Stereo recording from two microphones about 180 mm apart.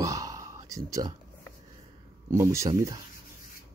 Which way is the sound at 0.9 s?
20° right (ahead or behind).